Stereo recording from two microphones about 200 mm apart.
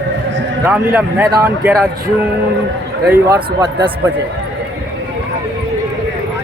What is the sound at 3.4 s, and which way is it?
Speech, 25° right (ahead or behind).